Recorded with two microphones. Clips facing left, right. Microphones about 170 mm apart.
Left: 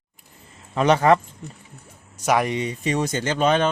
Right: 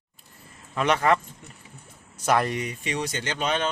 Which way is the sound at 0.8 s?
35° left (ahead or behind).